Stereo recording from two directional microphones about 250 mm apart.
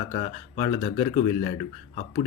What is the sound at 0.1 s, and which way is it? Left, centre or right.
Speech, left.